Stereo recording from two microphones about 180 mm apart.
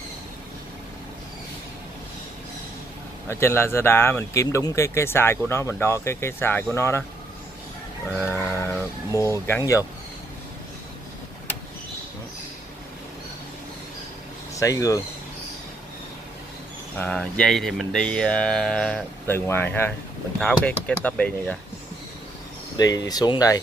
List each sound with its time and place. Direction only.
3.3 s speech: 15° left (ahead or behind)
8.1 s livestock: 5° right (ahead or behind)
8.4 s speech: 10° left (ahead or behind)
14.5 s speech: 20° left (ahead or behind)
16.9 s speech: 10° left (ahead or behind)
22.8 s speech: 20° left (ahead or behind)